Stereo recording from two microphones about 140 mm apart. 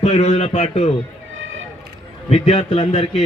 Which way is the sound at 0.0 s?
45° left (ahead or behind).